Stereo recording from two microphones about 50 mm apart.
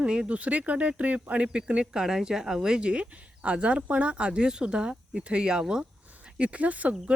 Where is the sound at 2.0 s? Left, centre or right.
Centre; by 7.1 s right.